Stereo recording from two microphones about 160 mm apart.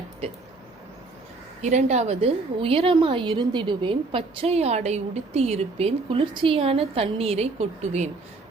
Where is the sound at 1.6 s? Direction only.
45° right (ahead or behind).